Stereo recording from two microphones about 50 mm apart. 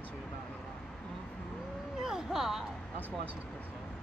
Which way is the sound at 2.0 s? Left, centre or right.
Centre.